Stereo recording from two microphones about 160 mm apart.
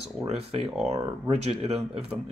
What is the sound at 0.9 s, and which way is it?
Speech, 20° right (ahead or behind).